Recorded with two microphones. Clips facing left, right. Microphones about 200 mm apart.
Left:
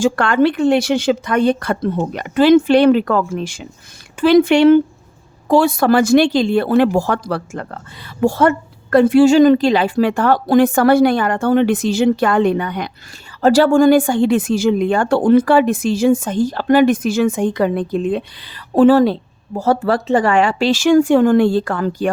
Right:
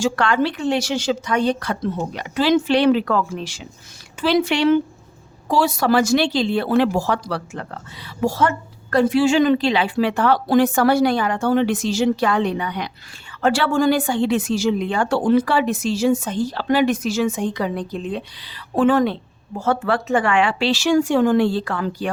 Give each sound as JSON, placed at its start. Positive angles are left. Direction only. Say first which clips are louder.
{"t": 0.0, "sound": "speech", "louder": "left 5 dB", "side_deg": 50}